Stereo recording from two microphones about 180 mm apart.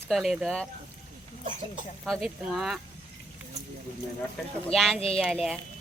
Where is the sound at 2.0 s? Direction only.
Centre (ahead or behind).